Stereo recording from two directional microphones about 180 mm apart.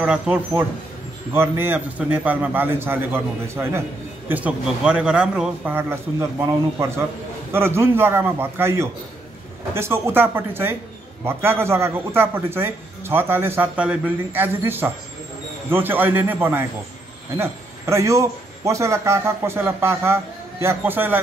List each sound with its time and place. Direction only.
0.0 s a man's voice: 5° right (ahead or behind)